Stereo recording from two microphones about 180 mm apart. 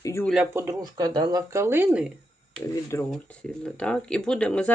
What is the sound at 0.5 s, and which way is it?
Speech, 15° right (ahead or behind).